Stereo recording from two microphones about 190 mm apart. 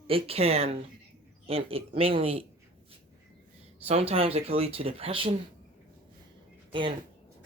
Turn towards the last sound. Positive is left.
turn(degrees=-25)  # may be behind; listen again after turning